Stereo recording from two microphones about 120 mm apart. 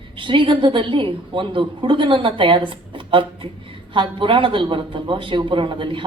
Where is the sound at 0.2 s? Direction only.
45° right (ahead or behind).